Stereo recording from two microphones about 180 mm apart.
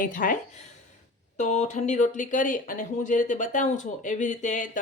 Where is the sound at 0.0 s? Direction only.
50° left (ahead or behind).